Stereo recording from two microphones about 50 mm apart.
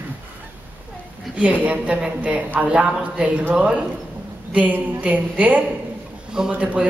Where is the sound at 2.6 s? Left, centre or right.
Centre.